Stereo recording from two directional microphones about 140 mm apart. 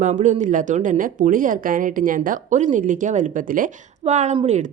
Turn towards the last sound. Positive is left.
turn(degrees=-55)  # may be behind; listen again after turning